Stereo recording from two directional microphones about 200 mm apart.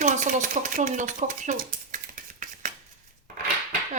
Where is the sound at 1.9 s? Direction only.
40° right (ahead or behind).